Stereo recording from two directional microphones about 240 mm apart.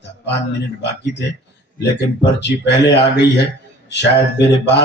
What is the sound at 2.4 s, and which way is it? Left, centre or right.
Speech, left.